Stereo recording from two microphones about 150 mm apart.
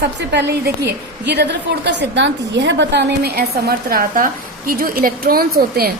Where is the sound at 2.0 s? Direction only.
90° right.